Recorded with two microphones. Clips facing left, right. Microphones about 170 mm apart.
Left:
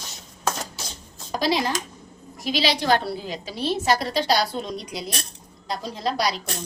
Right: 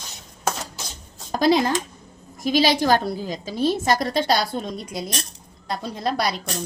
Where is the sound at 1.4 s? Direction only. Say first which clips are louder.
Right 5 dB; 50° right (ahead or behind).